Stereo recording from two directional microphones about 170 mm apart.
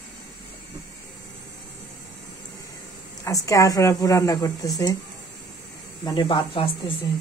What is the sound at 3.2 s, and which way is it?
A woman's voice, 20° left (ahead or behind).